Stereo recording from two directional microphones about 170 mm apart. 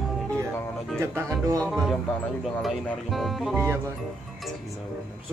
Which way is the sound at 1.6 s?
Centre (ahead or behind).